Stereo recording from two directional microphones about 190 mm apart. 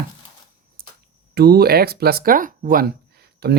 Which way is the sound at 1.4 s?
55° right (ahead or behind).